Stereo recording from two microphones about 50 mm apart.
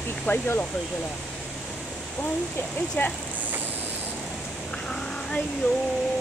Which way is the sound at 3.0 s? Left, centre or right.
Left.